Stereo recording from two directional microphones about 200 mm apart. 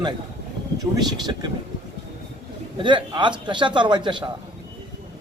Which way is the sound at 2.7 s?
25° right (ahead or behind).